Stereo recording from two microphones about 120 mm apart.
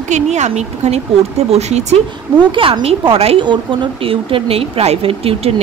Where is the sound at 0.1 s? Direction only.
75° right (ahead or behind).